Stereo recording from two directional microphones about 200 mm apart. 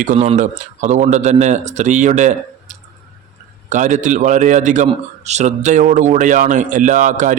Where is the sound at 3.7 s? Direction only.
35° right (ahead or behind).